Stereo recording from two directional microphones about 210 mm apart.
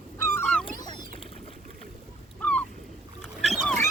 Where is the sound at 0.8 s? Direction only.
20° left (ahead or behind).